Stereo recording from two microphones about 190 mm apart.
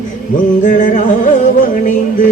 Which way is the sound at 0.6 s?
45° left (ahead or behind).